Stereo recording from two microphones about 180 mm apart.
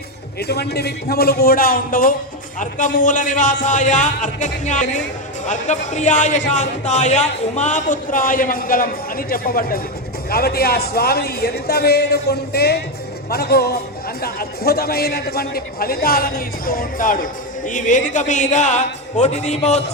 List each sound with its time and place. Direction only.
0.3 s a man's voice: 65° left (ahead or behind); by 19.8 s 40° left (ahead or behind)